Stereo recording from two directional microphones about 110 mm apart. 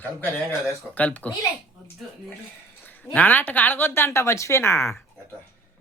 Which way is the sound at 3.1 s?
15° left (ahead or behind).